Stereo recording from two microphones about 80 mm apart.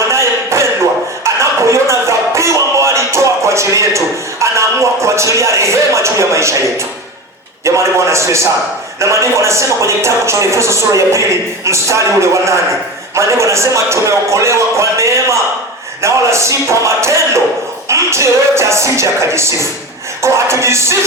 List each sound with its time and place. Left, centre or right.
0.1 s a sound: right
1.2 s music: right
7.6 s a man's voice: right